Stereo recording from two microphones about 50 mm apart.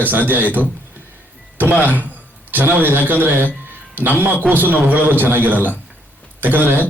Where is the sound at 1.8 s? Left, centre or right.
Right.